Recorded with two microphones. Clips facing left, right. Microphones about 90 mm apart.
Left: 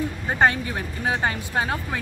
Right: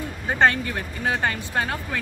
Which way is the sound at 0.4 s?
15° left (ahead or behind).